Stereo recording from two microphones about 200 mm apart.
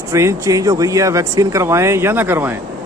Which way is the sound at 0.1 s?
15° right (ahead or behind).